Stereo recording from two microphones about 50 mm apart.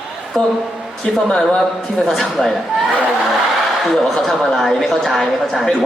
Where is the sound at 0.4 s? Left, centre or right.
Centre.